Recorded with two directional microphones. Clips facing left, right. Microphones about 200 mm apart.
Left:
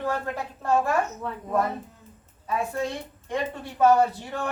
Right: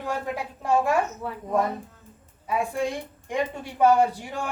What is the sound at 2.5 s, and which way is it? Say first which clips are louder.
A woman's voice: right 2 dB; 15° right (ahead or behind).